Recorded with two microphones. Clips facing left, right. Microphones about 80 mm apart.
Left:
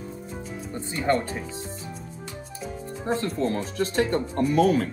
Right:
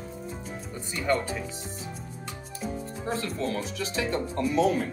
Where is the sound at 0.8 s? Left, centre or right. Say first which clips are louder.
Left 3 dB; left.